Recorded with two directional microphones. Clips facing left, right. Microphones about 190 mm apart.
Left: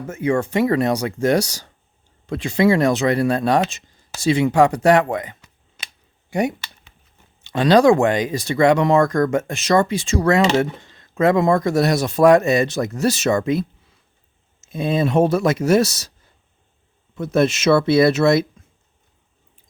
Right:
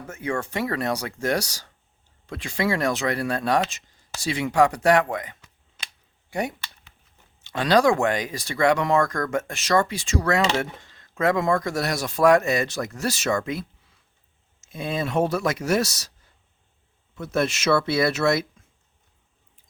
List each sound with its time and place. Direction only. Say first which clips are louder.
0.1 s speech: left 8 dB; 20° left (ahead or behind)
6.3 s a sound: left 7 dB; 15° left (ahead or behind)
7.4 s speech: left 6 dB; 20° left (ahead or behind)
14.7 s speech: left 7 dB; 25° left (ahead or behind)
17.2 s speech: left 7 dB; 20° left (ahead or behind)